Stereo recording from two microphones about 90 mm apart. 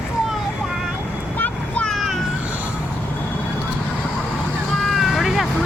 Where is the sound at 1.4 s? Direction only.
15° left (ahead or behind).